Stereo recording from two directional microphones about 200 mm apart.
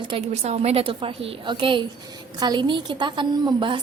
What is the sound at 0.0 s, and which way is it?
A woman's voice, 25° right (ahead or behind).